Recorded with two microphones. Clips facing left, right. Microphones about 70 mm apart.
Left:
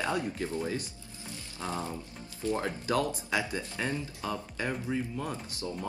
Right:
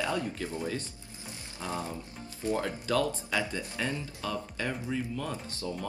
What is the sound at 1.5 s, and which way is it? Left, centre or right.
Speech, left.